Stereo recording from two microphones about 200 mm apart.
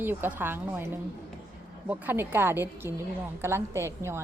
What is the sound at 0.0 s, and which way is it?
Speech, 10° right (ahead or behind).